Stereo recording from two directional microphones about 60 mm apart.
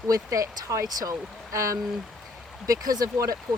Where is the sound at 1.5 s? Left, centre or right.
Right.